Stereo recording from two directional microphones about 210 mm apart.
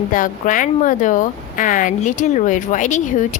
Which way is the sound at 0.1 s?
40° left (ahead or behind).